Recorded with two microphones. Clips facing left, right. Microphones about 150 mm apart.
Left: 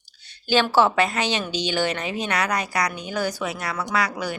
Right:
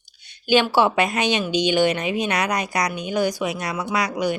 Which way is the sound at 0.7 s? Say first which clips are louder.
Even; 15° right (ahead or behind).